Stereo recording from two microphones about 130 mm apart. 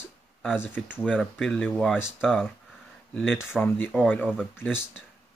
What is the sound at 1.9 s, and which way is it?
Speech, 5° right (ahead or behind).